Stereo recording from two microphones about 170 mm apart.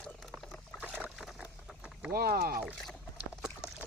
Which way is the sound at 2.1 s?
65° right (ahead or behind).